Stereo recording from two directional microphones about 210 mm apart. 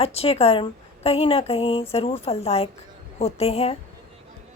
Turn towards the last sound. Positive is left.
turn(degrees=30)  # may be behind; listen again after turning